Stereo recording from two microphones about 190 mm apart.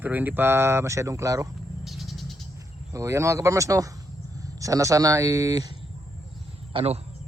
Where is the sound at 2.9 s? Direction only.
15° right (ahead or behind).